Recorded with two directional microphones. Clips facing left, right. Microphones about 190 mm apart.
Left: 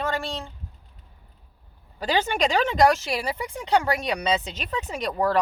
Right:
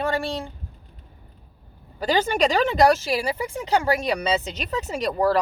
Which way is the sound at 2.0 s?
40° right (ahead or behind).